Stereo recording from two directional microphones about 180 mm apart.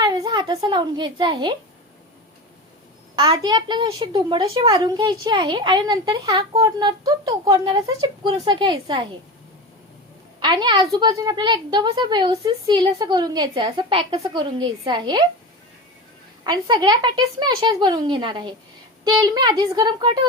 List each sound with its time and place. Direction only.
0.0 s a woman's voice: 20° right (ahead or behind)
3.2 s a child's voice: 25° right (ahead or behind)
10.4 s a child's voice: 25° right (ahead or behind)
16.4 s a child's voice: 25° right (ahead or behind)